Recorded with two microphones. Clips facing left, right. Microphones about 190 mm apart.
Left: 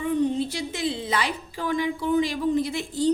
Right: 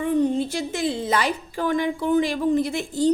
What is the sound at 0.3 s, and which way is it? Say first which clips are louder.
A woman's voice: right 3 dB; 50° right (ahead or behind).